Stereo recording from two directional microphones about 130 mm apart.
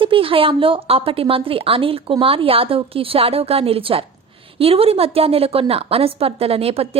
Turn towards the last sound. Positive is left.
turn(degrees=-50)  # may be behind; listen again after turning